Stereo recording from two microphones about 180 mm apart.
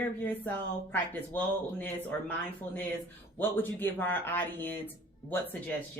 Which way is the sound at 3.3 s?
10° left (ahead or behind).